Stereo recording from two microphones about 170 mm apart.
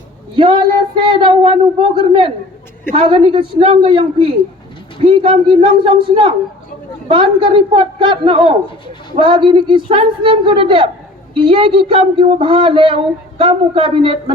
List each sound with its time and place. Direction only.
0.3 s a man's voice: 30° right (ahead or behind)